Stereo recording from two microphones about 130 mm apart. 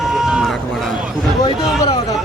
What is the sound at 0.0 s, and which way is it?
Run, 5° right (ahead or behind).